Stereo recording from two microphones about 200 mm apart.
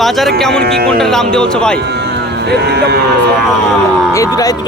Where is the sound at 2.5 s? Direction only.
55° right (ahead or behind).